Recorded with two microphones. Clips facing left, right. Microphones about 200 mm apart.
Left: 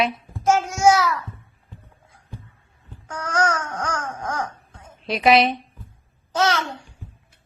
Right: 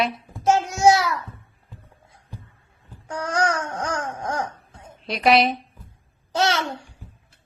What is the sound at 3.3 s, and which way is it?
Baby cry, 25° right (ahead or behind).